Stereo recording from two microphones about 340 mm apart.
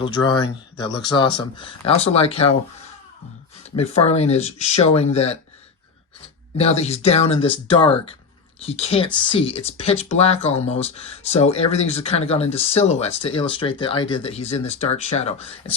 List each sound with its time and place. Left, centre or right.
0.0 s speech: centre
3.8 s speech: centre
6.6 s speech: centre